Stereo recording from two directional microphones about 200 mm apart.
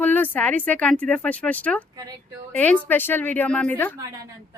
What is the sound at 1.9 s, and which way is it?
Speech, 20° right (ahead or behind).